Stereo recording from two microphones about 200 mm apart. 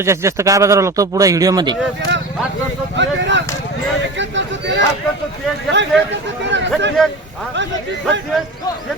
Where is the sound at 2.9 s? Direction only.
65° right (ahead or behind).